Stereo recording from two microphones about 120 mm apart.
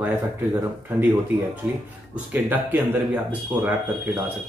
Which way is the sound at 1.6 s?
15° right (ahead or behind).